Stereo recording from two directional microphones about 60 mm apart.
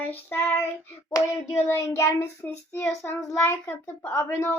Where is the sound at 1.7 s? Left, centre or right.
Left.